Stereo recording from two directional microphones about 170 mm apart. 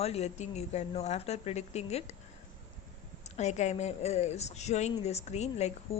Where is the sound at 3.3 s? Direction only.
40° left (ahead or behind).